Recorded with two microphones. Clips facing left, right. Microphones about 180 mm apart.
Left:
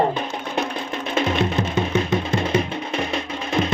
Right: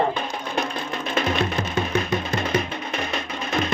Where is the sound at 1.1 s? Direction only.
25° left (ahead or behind).